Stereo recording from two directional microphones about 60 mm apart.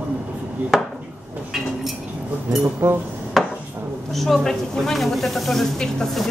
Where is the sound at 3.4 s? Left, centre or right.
Centre.